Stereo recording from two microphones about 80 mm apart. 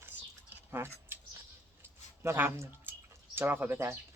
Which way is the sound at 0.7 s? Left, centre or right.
Right.